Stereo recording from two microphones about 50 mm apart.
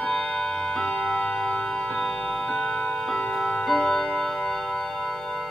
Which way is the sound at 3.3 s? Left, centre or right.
Centre.